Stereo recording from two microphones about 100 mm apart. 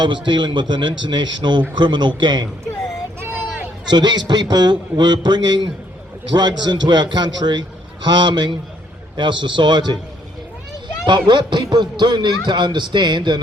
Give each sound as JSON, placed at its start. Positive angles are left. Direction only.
{"t": 0.0, "sound": "a man's voice", "side_deg": -50}
{"t": 3.8, "sound": "a man's voice", "side_deg": -45}
{"t": 11.0, "sound": "a man's voice", "side_deg": -50}